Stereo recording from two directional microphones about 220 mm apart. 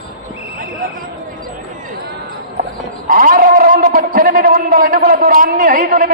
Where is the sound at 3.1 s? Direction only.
40° right (ahead or behind).